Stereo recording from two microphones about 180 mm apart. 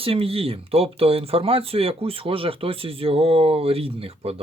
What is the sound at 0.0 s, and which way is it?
Speech, 30° right (ahead or behind).